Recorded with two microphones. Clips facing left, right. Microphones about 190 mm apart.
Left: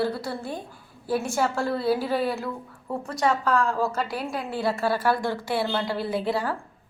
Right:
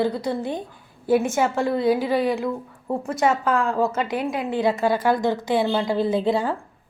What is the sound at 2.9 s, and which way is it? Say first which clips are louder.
A woman's voice: right 4 dB; 25° right (ahead or behind).